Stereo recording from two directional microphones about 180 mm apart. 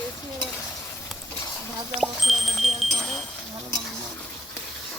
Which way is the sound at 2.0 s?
Centre (ahead or behind).